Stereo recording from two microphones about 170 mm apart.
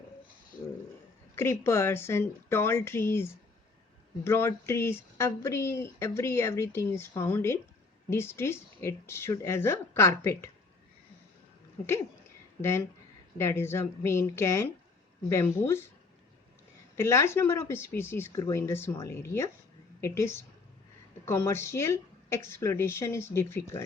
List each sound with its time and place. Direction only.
1.4 s speech: 15° left (ahead or behind)
13.3 s speech: 15° left (ahead or behind)
16.9 s a woman's voice: 15° left (ahead or behind)